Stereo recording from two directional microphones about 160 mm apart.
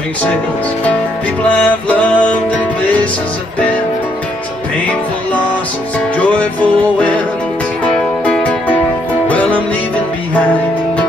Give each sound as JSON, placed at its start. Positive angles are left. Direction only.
{"t": 1.5, "sound": "music", "side_deg": 10}
{"t": 5.9, "sound": "music", "side_deg": 10}